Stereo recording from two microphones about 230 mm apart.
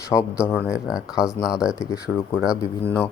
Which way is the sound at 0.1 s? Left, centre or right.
Centre.